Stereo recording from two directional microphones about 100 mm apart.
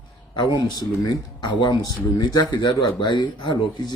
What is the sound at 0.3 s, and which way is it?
Speech, 45° left (ahead or behind).